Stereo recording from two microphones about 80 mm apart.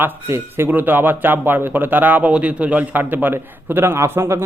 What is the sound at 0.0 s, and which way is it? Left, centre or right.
Speech, right.